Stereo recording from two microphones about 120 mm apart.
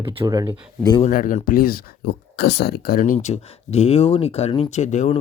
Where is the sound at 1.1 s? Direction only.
90° left.